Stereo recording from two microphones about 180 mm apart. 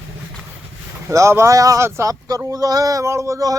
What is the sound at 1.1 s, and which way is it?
Speech, 15° right (ahead or behind).